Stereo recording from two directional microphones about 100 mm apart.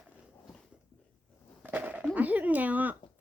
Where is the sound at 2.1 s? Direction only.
15° right (ahead or behind).